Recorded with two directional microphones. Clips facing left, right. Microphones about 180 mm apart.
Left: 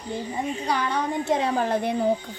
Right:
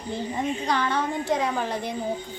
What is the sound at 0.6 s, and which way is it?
Speech, 10° left (ahead or behind).